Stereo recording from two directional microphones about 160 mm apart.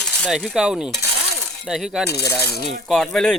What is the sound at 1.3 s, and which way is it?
Shatter, centre (ahead or behind).